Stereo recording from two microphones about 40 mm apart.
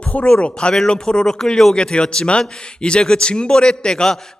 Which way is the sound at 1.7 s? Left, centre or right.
Centre.